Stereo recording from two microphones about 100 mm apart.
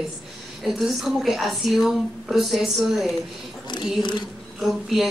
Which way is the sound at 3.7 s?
50° left (ahead or behind).